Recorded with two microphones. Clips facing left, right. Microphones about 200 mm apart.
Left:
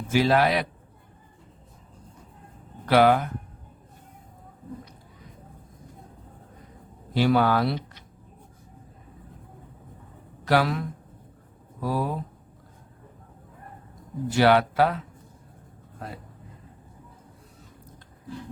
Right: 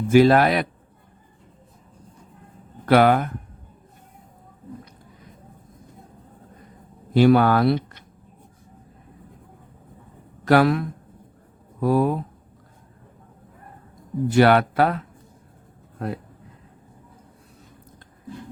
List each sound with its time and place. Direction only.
0.1 s a man's voice: 55° right (ahead or behind)
2.8 s speech: 55° right (ahead or behind)
7.1 s speech: 55° right (ahead or behind)
10.4 s speech: 55° right (ahead or behind)
14.3 s speech: 55° right (ahead or behind)